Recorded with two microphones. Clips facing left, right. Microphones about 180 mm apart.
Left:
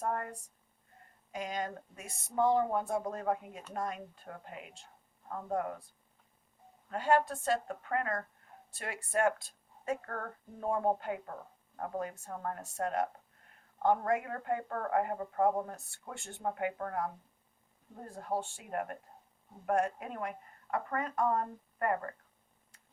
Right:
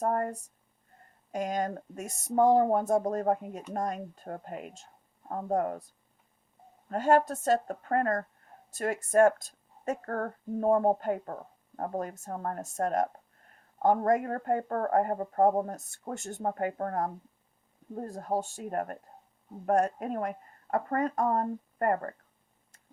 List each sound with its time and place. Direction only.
0.0 s a woman's voice: 40° right (ahead or behind)
6.8 s a woman's voice: 45° right (ahead or behind)